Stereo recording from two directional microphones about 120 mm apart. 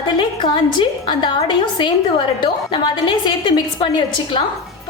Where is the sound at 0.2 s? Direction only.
40° left (ahead or behind).